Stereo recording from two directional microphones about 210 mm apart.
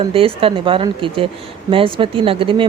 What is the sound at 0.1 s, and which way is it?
Speech, 25° right (ahead or behind).